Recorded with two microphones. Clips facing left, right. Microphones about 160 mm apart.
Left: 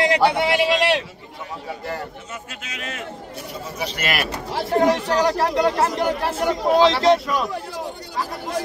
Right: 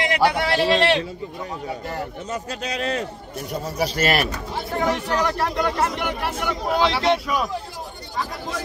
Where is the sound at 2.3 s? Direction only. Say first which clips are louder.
Right 8 dB; 35° right (ahead or behind).